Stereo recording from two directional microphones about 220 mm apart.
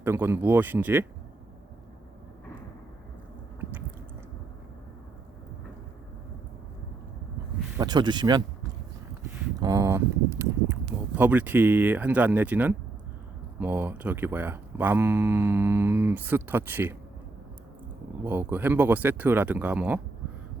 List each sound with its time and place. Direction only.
0.0 s speech: 10° right (ahead or behind)
7.8 s speech: 20° right (ahead or behind)
9.6 s speech: 15° right (ahead or behind)
18.3 s speech: 10° right (ahead or behind)